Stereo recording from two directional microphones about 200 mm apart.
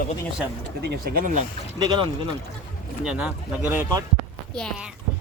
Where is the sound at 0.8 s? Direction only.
50° right (ahead or behind).